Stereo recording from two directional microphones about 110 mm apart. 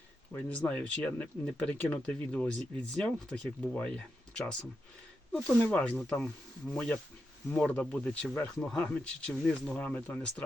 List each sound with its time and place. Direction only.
0.3 s speech: 15° left (ahead or behind)